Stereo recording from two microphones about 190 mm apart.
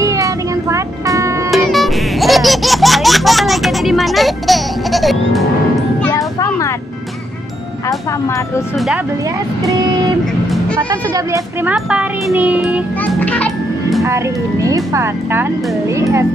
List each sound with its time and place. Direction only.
0.0 s music: 15° right (ahead or behind)
1.5 s music: centre (ahead or behind)
6.0 s a sound: 15° left (ahead or behind)
8.7 s speech: centre (ahead or behind)
10.9 s speech: 15° right (ahead or behind)
11.7 s speech: 5° right (ahead or behind)
13.0 s a child's voice: 10° left (ahead or behind)
14.0 s speech: 15° right (ahead or behind)